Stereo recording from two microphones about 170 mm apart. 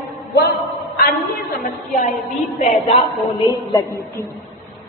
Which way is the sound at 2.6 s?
35° left (ahead or behind).